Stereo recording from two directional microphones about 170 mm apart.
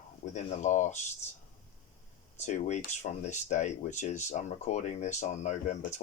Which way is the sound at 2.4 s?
45° left (ahead or behind).